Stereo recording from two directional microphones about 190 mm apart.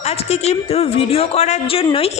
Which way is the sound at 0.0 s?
35° left (ahead or behind).